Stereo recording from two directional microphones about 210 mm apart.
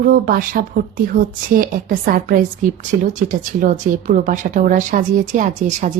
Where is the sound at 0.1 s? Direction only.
45° right (ahead or behind).